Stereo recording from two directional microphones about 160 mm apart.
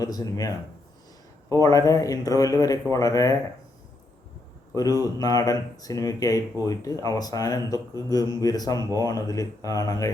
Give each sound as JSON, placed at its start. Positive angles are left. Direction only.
{"t": 0.0, "sound": "a man's voice", "side_deg": 25}
{"t": 4.7, "sound": "a man's voice", "side_deg": 20}